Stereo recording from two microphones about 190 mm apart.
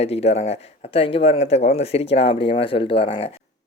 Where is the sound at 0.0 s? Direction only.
30° left (ahead or behind).